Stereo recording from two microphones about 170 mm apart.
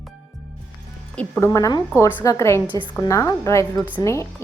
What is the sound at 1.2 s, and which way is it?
A woman's voice, 10° left (ahead or behind).